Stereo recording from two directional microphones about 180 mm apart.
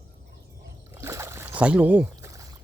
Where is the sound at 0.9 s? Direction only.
15° right (ahead or behind).